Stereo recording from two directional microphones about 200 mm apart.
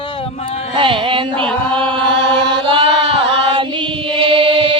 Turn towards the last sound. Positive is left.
turn(degrees=-25)  # may be behind; listen again after turning